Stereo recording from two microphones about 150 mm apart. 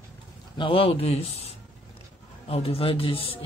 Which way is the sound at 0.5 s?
35° left (ahead or behind).